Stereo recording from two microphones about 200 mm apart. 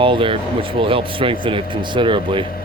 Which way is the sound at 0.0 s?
25° right (ahead or behind).